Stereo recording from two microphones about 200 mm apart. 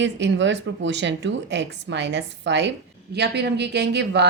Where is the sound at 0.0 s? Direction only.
65° right (ahead or behind).